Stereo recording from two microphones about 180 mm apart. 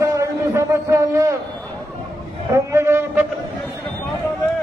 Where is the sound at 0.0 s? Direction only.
15° right (ahead or behind).